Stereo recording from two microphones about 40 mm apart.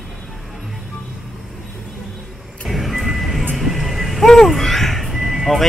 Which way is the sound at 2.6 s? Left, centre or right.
Centre.